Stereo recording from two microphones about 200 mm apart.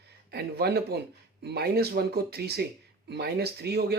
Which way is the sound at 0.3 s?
55° right (ahead or behind).